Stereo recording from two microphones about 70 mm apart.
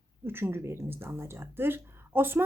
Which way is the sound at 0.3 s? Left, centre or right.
Right.